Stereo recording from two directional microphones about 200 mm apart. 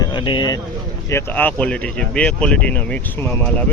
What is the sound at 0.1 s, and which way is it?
Speech, 25° left (ahead or behind).